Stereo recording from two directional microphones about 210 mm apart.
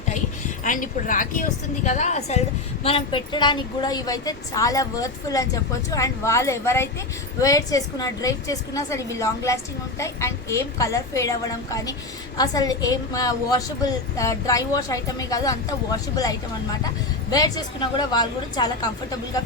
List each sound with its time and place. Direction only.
0.6 s a woman's voice: 40° left (ahead or behind); by 18.9 s 20° left (ahead or behind)